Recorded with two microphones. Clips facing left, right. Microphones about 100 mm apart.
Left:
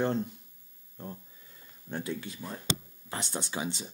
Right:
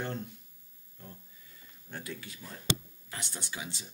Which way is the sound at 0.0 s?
30° left (ahead or behind).